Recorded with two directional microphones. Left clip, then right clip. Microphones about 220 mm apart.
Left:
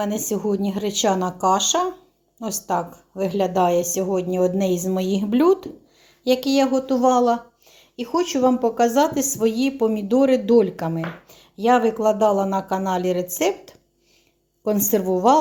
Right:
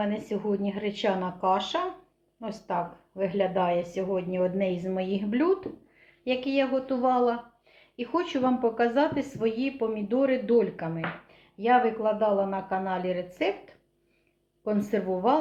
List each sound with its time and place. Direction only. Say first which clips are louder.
0.0 s a woman's voice: left 6 dB; 45° left (ahead or behind)
4.4 s a woman's voice: left 7 dB; 35° left (ahead or behind)
7.9 s a woman's voice: left 6 dB; 25° left (ahead or behind); by 13.2 s 45° left (ahead or behind)
14.6 s a woman's voice: left 7 dB; 40° left (ahead or behind)